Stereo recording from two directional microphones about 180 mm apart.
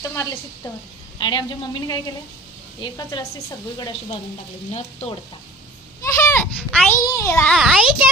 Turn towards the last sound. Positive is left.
turn(degrees=-5)  # may be behind; listen again after turning